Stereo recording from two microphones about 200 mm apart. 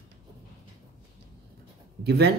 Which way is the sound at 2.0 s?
55° right (ahead or behind).